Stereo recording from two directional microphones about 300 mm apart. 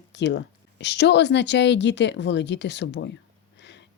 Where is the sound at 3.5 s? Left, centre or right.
Left.